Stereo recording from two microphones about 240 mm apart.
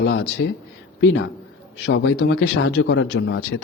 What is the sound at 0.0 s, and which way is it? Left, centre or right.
A man's voice, left.